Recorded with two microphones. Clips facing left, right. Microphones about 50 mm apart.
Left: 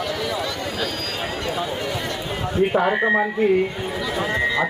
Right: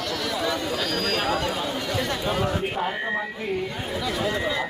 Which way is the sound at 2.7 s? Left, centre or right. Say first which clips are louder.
Left 8 dB; left.